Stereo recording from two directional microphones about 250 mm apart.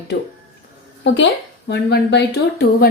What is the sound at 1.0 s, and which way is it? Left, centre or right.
A woman's voice, left.